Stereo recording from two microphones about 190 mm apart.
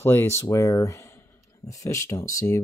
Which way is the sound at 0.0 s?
15° left (ahead or behind).